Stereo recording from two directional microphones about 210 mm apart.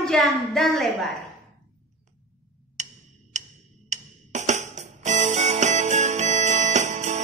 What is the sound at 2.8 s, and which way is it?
Tick-tock, 35° right (ahead or behind).